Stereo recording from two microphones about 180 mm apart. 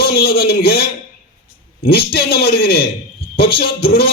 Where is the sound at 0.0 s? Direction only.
60° left (ahead or behind).